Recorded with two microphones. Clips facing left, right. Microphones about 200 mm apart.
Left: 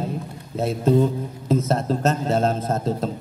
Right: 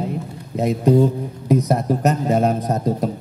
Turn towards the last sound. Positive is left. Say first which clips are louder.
# right 3 dB
turn(degrees=-15)  # may be behind; listen again after turning